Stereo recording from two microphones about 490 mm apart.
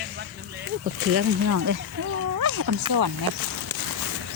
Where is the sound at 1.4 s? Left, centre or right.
Right.